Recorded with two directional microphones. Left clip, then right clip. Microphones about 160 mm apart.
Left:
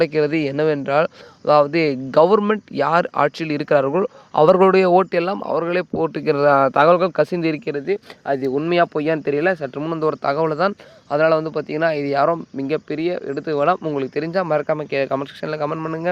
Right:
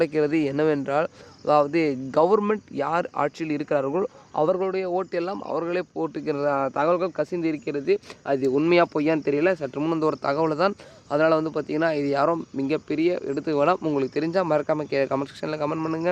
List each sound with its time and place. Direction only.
0.0 s speech: 25° left (ahead or behind)
4.4 s speech: 60° left (ahead or behind); by 4.9 s 85° left
4.9 s speech: 40° left (ahead or behind)
7.9 s a man's voice: 15° left (ahead or behind)
8.5 s a man's voice: 5° left (ahead or behind)